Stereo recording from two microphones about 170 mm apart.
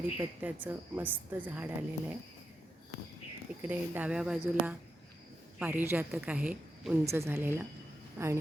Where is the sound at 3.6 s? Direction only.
10° right (ahead or behind).